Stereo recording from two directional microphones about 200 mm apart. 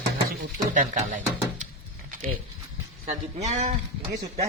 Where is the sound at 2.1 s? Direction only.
45° right (ahead or behind).